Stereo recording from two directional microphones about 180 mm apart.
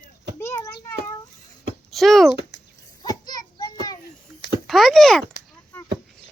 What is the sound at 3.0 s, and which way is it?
Children playing, 20° left (ahead or behind).